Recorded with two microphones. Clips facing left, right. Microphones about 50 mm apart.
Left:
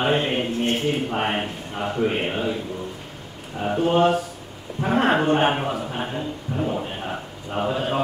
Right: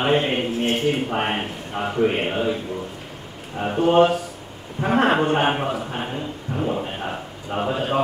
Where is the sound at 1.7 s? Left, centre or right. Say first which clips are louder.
Right 3 dB; centre.